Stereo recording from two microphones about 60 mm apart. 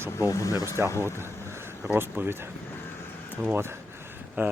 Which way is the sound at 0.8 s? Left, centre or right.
Right.